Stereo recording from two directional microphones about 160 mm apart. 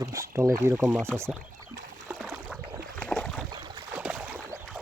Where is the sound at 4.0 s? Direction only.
10° right (ahead or behind).